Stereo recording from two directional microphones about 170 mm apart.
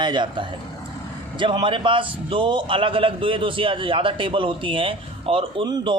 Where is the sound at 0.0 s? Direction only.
25° right (ahead or behind).